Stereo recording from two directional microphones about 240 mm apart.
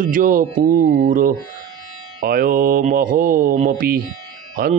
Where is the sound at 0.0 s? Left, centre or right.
Right.